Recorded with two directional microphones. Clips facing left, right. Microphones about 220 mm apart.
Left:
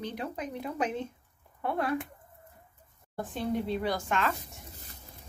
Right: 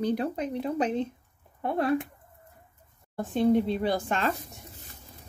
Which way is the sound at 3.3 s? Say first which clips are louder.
Right 8 dB; 25° right (ahead or behind).